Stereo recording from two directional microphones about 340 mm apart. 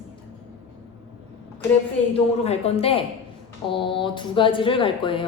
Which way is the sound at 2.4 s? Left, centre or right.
Centre.